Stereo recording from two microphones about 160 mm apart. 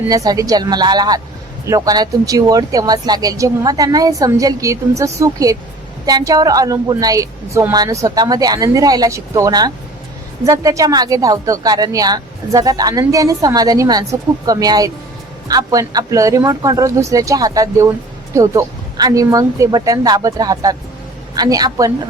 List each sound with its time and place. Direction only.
0.1 s speech: 20° right (ahead or behind)